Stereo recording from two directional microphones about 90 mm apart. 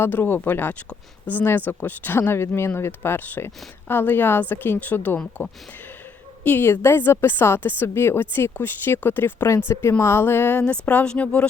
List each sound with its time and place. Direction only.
0.0 s speech: 25° left (ahead or behind)